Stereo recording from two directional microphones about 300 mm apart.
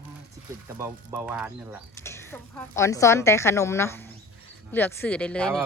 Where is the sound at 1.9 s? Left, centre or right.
Centre.